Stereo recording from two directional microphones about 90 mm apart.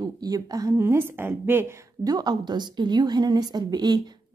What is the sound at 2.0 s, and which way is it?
Speech, 50° right (ahead or behind).